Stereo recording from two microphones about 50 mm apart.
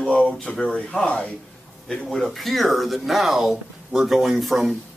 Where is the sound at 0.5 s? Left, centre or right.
Left.